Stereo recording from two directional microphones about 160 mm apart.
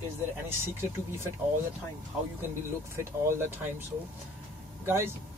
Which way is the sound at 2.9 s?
15° right (ahead or behind).